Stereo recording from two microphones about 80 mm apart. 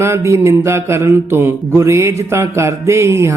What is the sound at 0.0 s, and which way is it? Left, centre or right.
Speech, right.